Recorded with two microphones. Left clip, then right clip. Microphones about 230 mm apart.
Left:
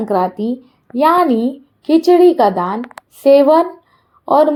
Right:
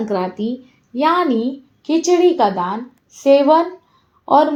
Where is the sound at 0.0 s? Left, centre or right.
Left.